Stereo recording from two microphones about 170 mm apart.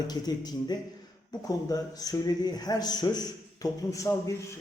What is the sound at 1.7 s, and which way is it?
A man's voice, 20° left (ahead or behind).